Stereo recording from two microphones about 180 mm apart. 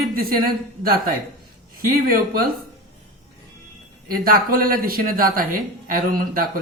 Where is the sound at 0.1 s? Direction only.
55° right (ahead or behind).